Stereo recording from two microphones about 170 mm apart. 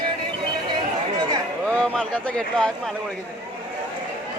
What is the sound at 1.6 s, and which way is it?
Speech, 5° left (ahead or behind).